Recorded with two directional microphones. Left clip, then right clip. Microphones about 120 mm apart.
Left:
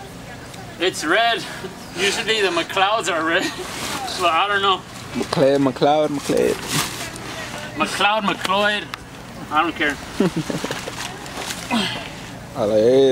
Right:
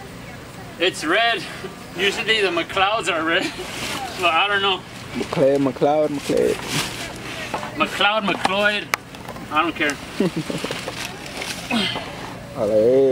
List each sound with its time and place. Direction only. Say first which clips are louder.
0.7 s speech: left 1 dB; centre (ahead or behind)
5.3 s speech: left 1 dB; 20° left (ahead or behind); by 10.8 s centre (ahead or behind)
11.3 s a sound: left 1 dB; centre (ahead or behind)
12.7 s speech: left 1 dB; 40° left (ahead or behind)